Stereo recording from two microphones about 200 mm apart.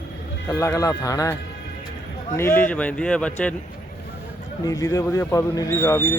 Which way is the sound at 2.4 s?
10° left (ahead or behind).